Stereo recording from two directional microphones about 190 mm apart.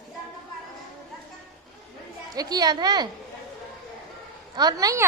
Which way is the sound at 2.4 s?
20° right (ahead or behind).